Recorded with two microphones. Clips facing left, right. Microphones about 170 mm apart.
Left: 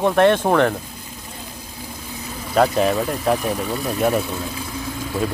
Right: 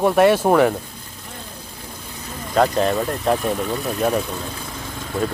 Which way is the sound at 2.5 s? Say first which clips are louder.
Left 1 dB; 5° left (ahead or behind).